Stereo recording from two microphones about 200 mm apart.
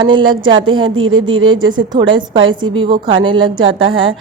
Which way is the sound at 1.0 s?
80° right.